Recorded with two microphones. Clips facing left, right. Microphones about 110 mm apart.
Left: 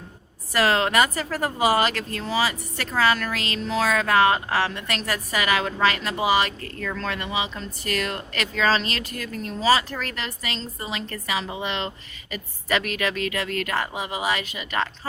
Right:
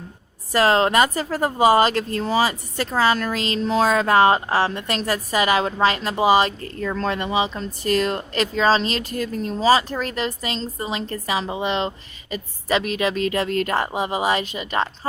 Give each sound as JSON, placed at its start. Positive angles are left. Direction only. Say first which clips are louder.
{"t": 0.5, "sound": "a woman's voice", "louder": "right 4 dB", "side_deg": -30}